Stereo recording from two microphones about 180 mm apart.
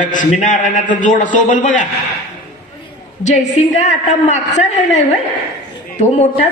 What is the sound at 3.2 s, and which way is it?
A woman's voice, 40° left (ahead or behind).